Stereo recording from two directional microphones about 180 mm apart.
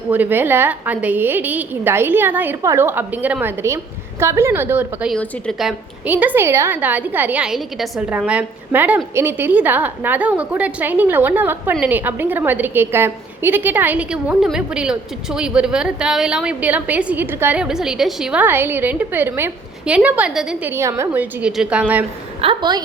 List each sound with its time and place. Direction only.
0.1 s a woman's voice: 10° right (ahead or behind)
5.1 s a woman's voice: 5° left (ahead or behind)
22.4 s a woman's voice: 25° right (ahead or behind)